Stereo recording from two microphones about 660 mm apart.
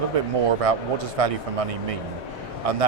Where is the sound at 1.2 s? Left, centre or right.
Right.